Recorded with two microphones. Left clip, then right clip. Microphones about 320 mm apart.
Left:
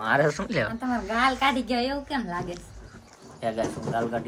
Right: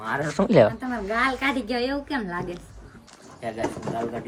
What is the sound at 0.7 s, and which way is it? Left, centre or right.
A woman's voice, centre.